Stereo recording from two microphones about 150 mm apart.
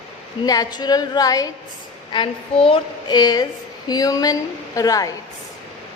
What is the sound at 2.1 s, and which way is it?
A woman's voice, 35° left (ahead or behind).